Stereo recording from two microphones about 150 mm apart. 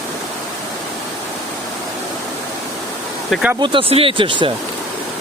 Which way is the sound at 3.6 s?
35° right (ahead or behind).